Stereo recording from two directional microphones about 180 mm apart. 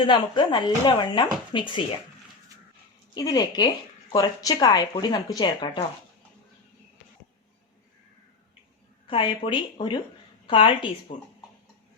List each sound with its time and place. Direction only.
0.0 s speech: 25° left (ahead or behind)
3.2 s speech: 20° left (ahead or behind)
9.0 s speech: 25° left (ahead or behind)